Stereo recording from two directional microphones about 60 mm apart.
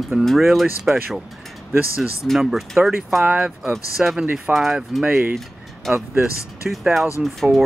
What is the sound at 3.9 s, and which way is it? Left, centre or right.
Speech, centre.